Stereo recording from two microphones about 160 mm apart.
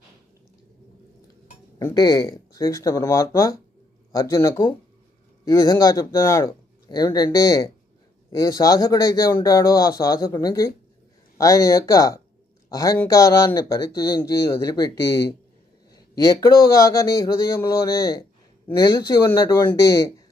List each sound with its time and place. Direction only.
1.8 s a man's voice: 20° left (ahead or behind)